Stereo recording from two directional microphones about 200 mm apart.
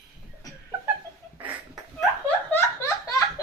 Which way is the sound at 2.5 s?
15° left (ahead or behind).